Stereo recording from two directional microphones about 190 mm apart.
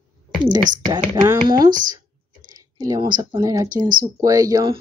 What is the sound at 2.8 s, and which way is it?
Speech, 20° right (ahead or behind).